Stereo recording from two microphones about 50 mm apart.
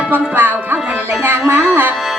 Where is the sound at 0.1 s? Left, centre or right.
Right.